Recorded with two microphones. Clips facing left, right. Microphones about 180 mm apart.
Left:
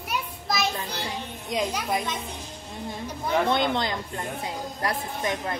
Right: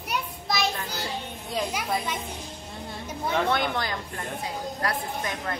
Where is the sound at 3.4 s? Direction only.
20° left (ahead or behind).